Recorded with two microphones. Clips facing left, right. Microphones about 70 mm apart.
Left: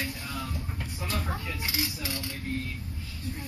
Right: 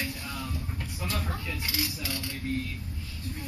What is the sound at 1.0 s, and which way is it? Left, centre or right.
Speech, centre.